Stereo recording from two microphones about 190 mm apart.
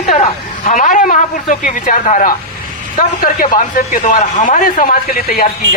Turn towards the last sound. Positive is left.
turn(degrees=50)  # may be behind; listen again after turning